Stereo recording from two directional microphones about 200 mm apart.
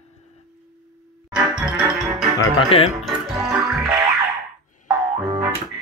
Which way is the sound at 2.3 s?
25° left (ahead or behind).